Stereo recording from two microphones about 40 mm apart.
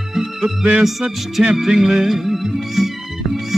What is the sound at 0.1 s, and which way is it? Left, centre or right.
Music, centre.